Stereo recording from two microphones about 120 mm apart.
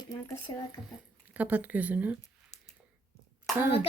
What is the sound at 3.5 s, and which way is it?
Speech, 20° right (ahead or behind).